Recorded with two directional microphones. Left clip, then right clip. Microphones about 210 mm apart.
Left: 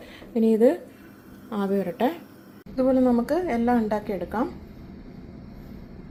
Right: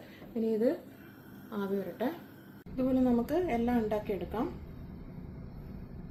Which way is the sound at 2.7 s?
10° left (ahead or behind).